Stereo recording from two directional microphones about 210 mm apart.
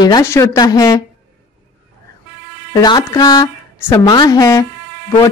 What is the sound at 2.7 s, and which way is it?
Speech, 20° left (ahead or behind).